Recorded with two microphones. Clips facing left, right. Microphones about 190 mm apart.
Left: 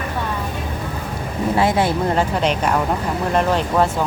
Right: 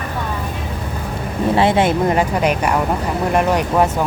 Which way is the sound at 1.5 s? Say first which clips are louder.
Right 3 dB; 25° right (ahead or behind).